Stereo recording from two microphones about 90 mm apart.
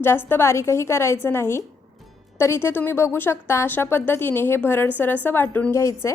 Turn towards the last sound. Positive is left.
turn(degrees=30)  # may be behind; listen again after turning